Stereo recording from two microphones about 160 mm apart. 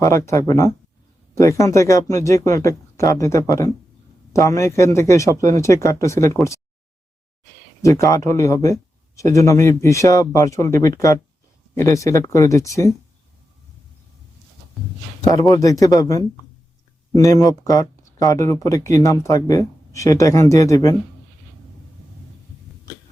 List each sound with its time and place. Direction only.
0.0 s a man's voice: 15° left (ahead or behind)
7.8 s speech: 20° left (ahead or behind)
15.3 s speech: 20° left (ahead or behind)